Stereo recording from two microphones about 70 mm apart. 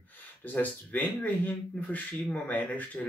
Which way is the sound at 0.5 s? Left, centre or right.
Left.